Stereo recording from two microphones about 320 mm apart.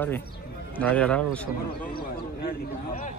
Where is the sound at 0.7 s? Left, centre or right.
Centre.